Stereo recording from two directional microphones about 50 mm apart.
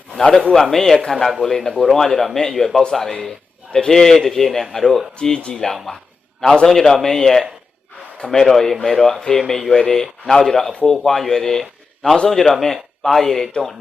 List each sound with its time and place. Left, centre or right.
0.2 s a man's voice: centre
5.4 s speech: centre
5.7 s a man's voice: centre
8.2 s a man's voice: centre
9.7 s speech: centre
10.4 s a man's voice: centre